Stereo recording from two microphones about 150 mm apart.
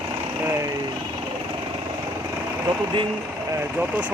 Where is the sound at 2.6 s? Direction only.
30° right (ahead or behind).